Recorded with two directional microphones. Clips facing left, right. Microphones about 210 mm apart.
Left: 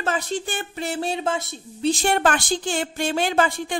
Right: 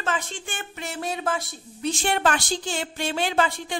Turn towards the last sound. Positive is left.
turn(degrees=50)  # may be behind; listen again after turning